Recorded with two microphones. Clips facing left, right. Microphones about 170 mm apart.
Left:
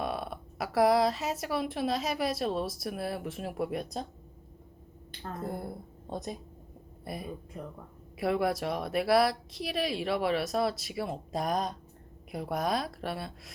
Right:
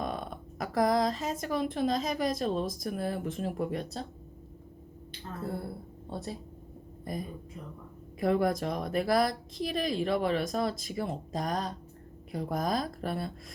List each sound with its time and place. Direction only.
0.0 s speech: 5° left (ahead or behind)
5.4 s speech: 15° left (ahead or behind)
7.0 s speech: 10° left (ahead or behind)